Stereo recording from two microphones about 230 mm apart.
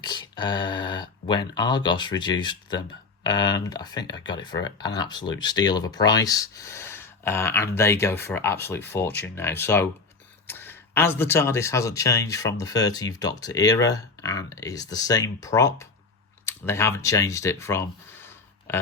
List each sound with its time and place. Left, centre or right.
0.0 s speech: centre